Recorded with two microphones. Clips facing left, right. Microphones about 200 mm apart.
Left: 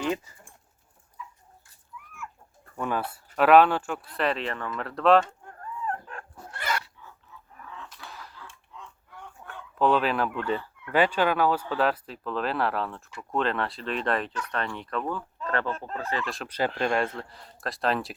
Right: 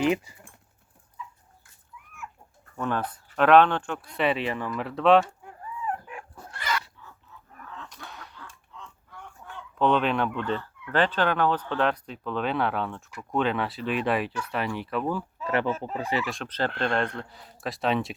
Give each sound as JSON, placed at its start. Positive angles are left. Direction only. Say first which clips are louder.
{"t": 0.0, "sound": "speech", "louder": "right 5 dB", "side_deg": -15}
{"t": 2.7, "sound": "speech", "louder": "right 1 dB", "side_deg": 10}
{"t": 5.5, "sound": "dog", "louder": "even", "side_deg": -10}
{"t": 7.9, "sound": "chicken", "louder": "right 1 dB", "side_deg": 0}
{"t": 9.7, "sound": "speech", "louder": "even", "side_deg": 5}
{"t": 16.2, "sound": "speech", "louder": "even", "side_deg": 0}